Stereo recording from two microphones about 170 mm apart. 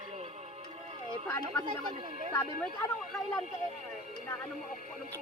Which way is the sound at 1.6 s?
35° right (ahead or behind).